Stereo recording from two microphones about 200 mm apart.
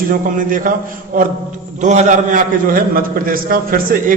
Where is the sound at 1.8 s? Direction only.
35° right (ahead or behind).